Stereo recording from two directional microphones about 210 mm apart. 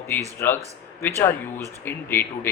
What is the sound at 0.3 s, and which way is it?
Speech, 10° left (ahead or behind).